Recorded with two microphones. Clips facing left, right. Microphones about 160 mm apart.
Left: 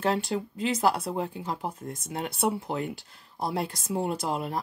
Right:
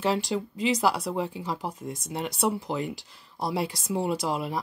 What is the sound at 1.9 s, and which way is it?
Speech, 50° left (ahead or behind).